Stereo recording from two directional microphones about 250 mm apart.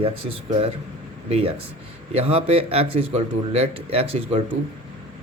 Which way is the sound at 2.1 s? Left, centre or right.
Right.